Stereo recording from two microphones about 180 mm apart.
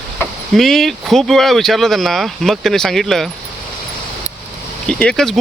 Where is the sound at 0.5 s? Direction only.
Centre (ahead or behind).